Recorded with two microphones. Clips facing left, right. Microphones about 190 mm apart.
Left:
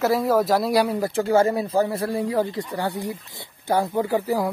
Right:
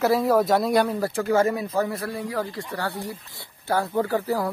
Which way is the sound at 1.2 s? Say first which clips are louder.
Left 2 dB; 30° left (ahead or behind).